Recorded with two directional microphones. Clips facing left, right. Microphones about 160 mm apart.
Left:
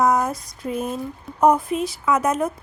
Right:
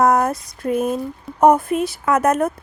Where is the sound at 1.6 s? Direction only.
60° right (ahead or behind).